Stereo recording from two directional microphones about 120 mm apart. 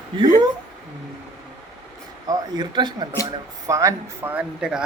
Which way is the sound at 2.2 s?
35° right (ahead or behind).